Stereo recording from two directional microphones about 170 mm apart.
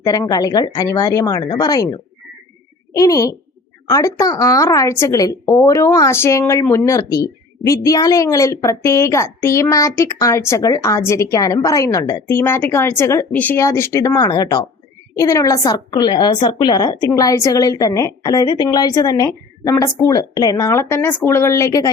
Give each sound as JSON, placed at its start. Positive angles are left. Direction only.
{"t": 0.0, "sound": "speech", "side_deg": 20}